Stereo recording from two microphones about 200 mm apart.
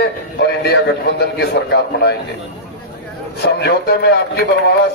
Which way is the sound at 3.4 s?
55° left (ahead or behind).